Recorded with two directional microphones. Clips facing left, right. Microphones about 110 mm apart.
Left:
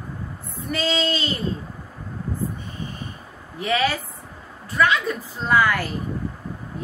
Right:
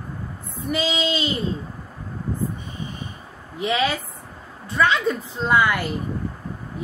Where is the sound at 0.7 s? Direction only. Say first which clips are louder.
Even; 10° right (ahead or behind).